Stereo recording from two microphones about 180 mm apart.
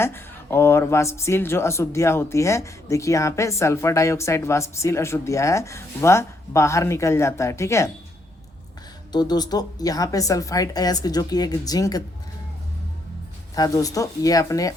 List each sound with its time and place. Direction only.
0.0 s a woman's voice: 15° left (ahead or behind)
9.1 s a woman's voice: 20° left (ahead or behind)
13.6 s a woman's voice: 20° left (ahead or behind)